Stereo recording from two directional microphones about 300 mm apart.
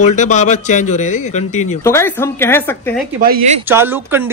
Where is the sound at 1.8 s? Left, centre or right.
Centre.